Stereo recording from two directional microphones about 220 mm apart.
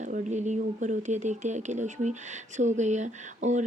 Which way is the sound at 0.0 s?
35° right (ahead or behind).